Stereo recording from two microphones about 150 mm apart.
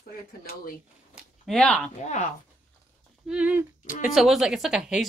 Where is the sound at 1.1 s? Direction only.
5° right (ahead or behind).